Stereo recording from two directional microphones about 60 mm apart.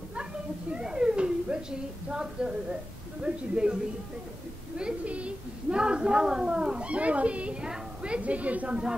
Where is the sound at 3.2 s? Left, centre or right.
Centre.